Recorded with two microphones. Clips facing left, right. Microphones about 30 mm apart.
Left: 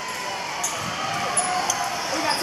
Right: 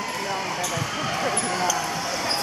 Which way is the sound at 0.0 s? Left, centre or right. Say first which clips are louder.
Right 2 dB; centre.